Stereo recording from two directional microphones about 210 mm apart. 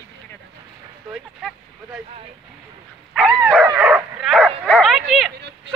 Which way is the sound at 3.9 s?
Centre (ahead or behind).